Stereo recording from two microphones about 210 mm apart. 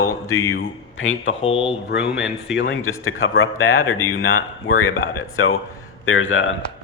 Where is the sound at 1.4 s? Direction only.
25° left (ahead or behind).